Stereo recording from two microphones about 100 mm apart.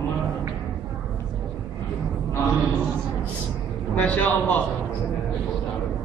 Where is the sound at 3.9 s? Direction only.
15° left (ahead or behind).